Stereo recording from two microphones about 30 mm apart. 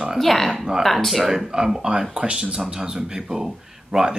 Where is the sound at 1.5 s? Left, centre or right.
Right.